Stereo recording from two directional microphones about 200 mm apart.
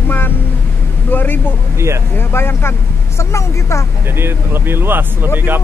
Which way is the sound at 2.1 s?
10° left (ahead or behind).